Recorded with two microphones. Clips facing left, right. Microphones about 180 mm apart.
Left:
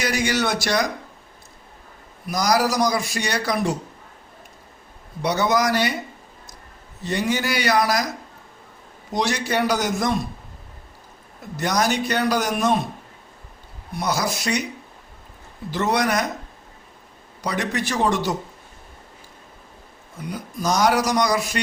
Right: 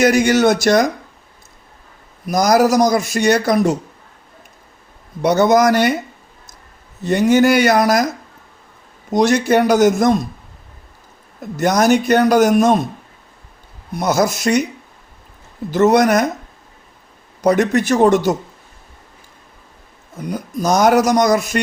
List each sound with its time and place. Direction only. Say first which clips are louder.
0.0 s a man's voice: right 10 dB; 50° right (ahead or behind)
2.2 s a man's voice: right 7 dB; 45° right (ahead or behind)
5.2 s a man's voice: right 8 dB; 50° right (ahead or behind)
7.0 s a man's voice: right 11 dB; 45° right (ahead or behind)
9.1 s a man's voice: right 9 dB; 45° right (ahead or behind)
11.5 s a man's voice: right 8 dB; 45° right (ahead or behind)
13.9 s a man's voice: right 8 dB; 45° right (ahead or behind)
15.7 s a man's voice: right 9 dB; 45° right (ahead or behind)
17.4 s a man's voice: right 11 dB; 45° right (ahead or behind)
20.2 s a man's voice: right 6 dB; 45° right (ahead or behind)